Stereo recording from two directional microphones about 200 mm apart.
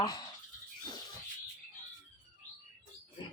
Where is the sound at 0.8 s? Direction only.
20° left (ahead or behind).